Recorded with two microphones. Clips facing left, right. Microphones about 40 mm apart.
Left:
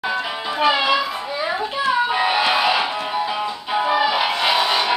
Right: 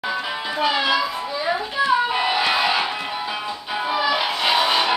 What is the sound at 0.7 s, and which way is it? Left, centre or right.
Speech, left.